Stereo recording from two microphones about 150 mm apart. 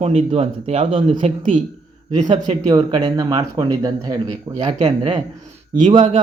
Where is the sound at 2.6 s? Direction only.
25° right (ahead or behind).